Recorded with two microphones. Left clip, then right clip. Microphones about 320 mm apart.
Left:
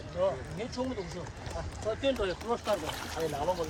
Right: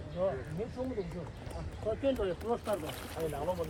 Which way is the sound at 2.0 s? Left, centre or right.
Left.